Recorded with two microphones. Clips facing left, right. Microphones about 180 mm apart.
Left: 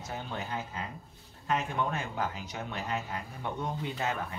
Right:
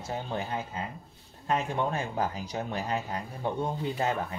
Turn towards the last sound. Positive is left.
turn(degrees=-30)  # may be behind; listen again after turning